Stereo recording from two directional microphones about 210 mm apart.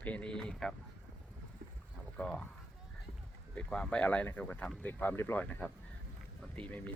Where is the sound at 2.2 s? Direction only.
10° left (ahead or behind).